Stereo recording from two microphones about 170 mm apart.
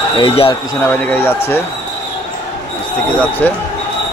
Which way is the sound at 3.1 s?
10° left (ahead or behind).